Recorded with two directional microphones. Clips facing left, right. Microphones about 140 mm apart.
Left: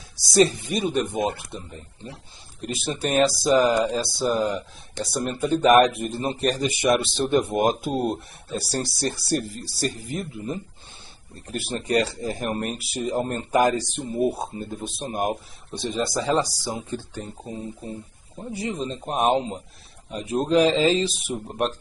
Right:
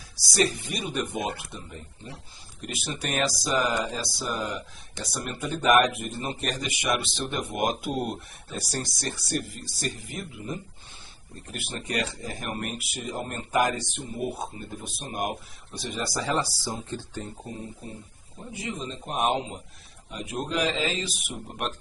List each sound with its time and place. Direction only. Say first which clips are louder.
0.2 s speech: left 7 dB; 25° left (ahead or behind)
18.5 s speech: left 6 dB; 35° left (ahead or behind)